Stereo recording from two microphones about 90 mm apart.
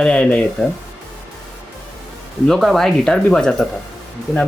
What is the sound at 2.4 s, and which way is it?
Speech, 5° left (ahead or behind).